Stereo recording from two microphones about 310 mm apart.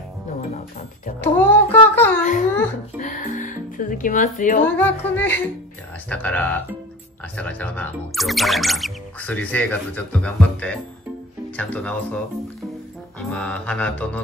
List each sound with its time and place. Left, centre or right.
1.2 s child singing: centre
3.0 s music: left
4.6 s speech: centre
13.3 s speech: centre